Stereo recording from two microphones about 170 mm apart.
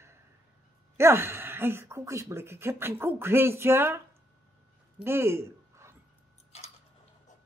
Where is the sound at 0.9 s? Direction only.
15° right (ahead or behind).